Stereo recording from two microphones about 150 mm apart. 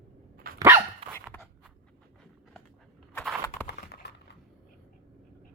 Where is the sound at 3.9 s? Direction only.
90° left.